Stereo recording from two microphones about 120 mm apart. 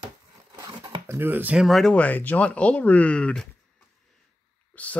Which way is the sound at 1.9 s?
15° left (ahead or behind).